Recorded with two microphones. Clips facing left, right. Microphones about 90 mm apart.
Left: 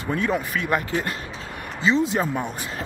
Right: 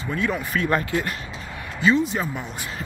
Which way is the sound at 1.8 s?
30° left (ahead or behind).